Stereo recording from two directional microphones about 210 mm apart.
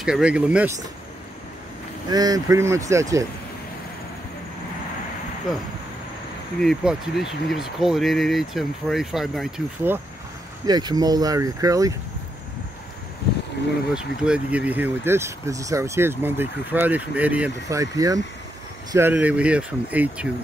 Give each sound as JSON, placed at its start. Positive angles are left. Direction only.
{"t": 0.0, "sound": "speech", "side_deg": -5}
{"t": 2.0, "sound": "speech", "side_deg": -20}
{"t": 6.6, "sound": "speech", "side_deg": 0}
{"t": 10.7, "sound": "speech", "side_deg": -20}
{"t": 13.9, "sound": "speech", "side_deg": -5}